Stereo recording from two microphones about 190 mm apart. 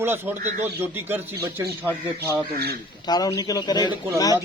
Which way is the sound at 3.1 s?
20° left (ahead or behind).